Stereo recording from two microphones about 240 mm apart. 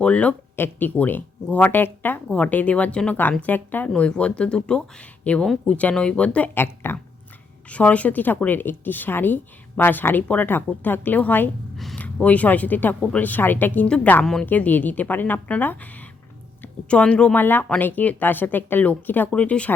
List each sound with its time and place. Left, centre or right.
0.0 s speech: centre
16.9 s speech: centre